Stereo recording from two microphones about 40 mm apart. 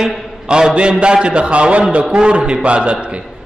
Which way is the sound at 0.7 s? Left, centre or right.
Right.